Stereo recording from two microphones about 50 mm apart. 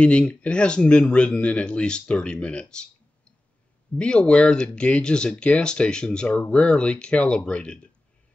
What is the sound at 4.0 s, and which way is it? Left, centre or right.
Speech, centre.